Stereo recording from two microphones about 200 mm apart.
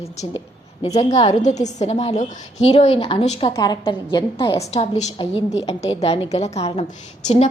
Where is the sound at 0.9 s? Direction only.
35° left (ahead or behind).